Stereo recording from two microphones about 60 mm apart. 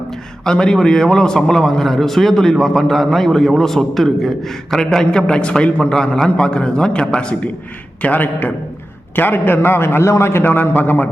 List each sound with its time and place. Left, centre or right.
0.4 s a man's voice: centre
8.0 s a man's voice: left
10.4 s a man's voice: left